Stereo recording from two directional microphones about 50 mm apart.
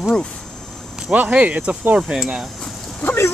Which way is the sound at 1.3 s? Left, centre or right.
Right.